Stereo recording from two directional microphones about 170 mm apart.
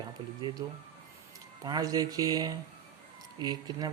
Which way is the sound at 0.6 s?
20° right (ahead or behind).